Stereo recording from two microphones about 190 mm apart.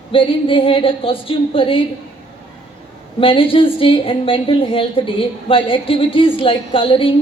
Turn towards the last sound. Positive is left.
turn(degrees=30)  # may be behind; listen again after turning